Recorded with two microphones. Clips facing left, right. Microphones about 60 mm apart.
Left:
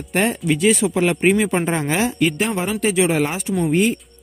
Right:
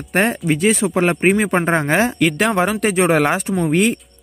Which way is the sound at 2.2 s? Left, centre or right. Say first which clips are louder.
Right 4 dB; right.